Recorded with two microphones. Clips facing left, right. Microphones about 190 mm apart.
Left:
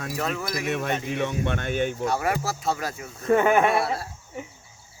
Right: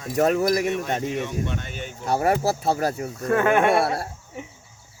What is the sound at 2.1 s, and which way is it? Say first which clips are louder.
Speech: right 5 dB; 30° right (ahead or behind).